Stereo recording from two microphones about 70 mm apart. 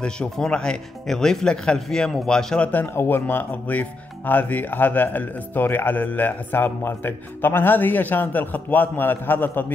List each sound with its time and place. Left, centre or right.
0.0 s speech: centre
2.7 s speech: left